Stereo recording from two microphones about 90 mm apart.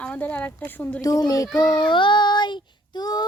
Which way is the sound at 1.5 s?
50° left (ahead or behind).